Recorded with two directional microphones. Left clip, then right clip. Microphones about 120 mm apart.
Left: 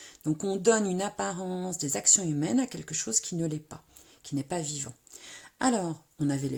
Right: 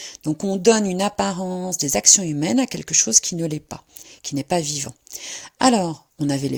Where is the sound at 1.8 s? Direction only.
40° right (ahead or behind).